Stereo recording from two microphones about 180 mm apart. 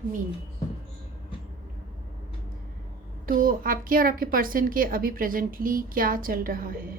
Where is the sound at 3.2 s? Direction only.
50° right (ahead or behind).